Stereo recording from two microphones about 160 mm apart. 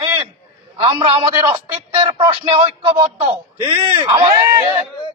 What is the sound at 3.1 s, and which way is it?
Speech, 10° right (ahead or behind).